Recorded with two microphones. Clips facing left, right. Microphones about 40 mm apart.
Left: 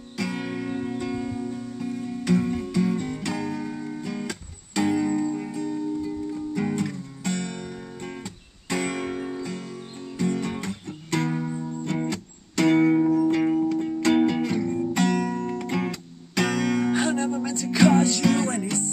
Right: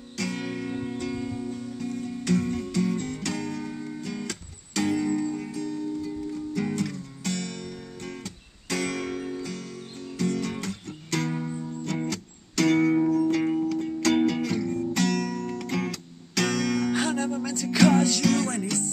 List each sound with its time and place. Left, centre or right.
0.2 s music: centre
0.9 s music: centre
10.1 s guitar: centre
10.5 s music: centre
13.4 s music: centre
14.2 s guitar: centre